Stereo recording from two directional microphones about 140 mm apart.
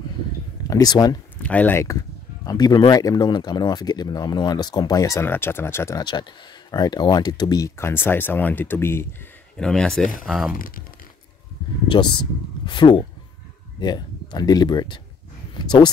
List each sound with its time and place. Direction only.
0.7 s speech: 25° left (ahead or behind)
1.4 s speech: 10° left (ahead or behind)
9.6 s speech: 5° left (ahead or behind)
10.5 s speech: 90° left
11.9 s speech: 35° left (ahead or behind)